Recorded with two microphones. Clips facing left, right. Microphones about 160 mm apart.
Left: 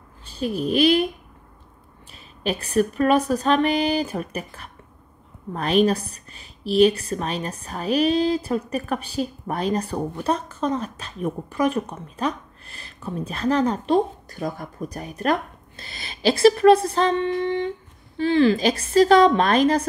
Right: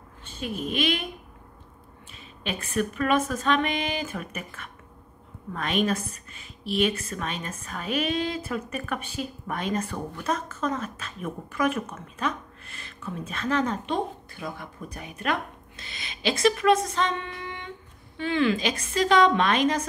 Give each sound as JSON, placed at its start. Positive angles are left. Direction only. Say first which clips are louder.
{"t": 0.2, "sound": "a child's voice", "louder": "left 7 dB", "side_deg": 35}
{"t": 2.4, "sound": "a woman's voice", "louder": "left 7 dB", "side_deg": 40}